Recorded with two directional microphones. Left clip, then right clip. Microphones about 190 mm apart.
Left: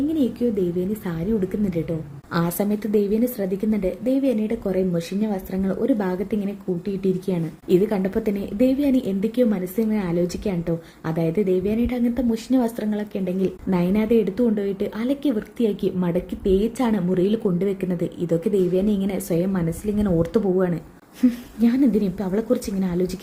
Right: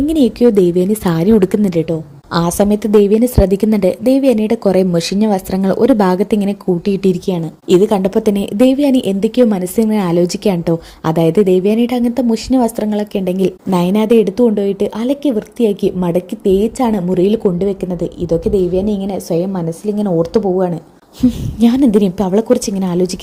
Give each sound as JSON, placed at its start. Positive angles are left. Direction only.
{"t": 0.1, "sound": "a woman's voice", "side_deg": -35}
{"t": 7.3, "sound": "a woman's voice", "side_deg": -25}
{"t": 21.6, "sound": "a woman's voice", "side_deg": -30}